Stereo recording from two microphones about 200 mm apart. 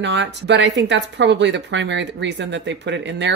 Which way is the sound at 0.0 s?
60° right (ahead or behind).